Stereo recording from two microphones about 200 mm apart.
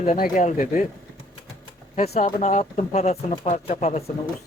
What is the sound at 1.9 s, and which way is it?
Speech, 35° left (ahead or behind).